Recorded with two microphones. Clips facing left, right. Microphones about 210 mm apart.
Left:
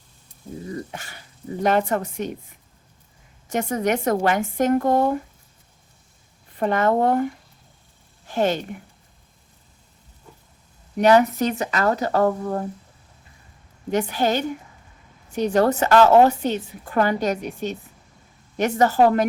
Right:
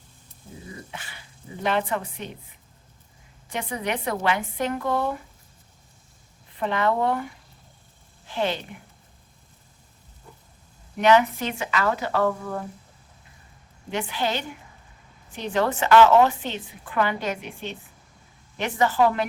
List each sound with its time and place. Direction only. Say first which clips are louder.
0.7 s a woman's voice: left 7 dB; 45° left (ahead or behind)
3.5 s a woman's voice: left 7 dB; 45° left (ahead or behind)
6.6 s a woman's voice: left 4 dB; 45° left (ahead or behind)
8.3 s speech: left 5 dB; 45° left (ahead or behind)
10.9 s a woman's voice: left 3 dB; 40° left (ahead or behind)
13.9 s a woman's voice: left 6 dB; 45° left (ahead or behind)